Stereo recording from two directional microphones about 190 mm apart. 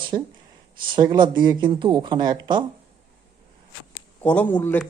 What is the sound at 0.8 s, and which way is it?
Speech, 25° right (ahead or behind).